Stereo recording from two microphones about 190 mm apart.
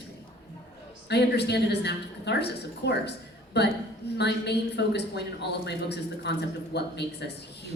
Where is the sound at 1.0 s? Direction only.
60° left (ahead or behind).